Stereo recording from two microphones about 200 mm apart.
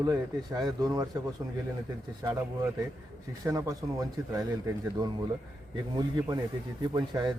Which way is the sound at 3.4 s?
15° right (ahead or behind).